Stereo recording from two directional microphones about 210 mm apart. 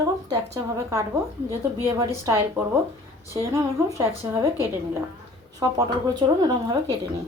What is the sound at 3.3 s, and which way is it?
Speech, 15° right (ahead or behind).